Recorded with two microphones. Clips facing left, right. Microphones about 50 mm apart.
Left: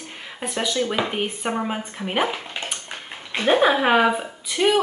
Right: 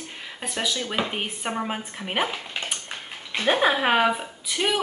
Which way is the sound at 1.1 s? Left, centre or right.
Centre.